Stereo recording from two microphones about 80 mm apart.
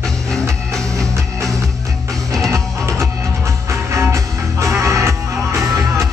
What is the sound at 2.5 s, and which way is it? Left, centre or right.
Music, right.